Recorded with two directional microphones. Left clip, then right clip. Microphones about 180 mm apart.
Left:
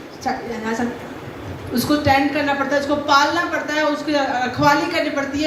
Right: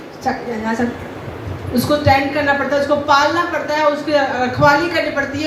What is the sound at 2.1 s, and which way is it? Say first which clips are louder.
A man's voice: right 3 dB; 35° left (ahead or behind).